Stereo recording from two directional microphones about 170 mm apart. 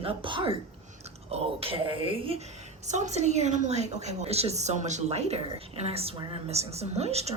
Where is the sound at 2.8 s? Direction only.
45° right (ahead or behind).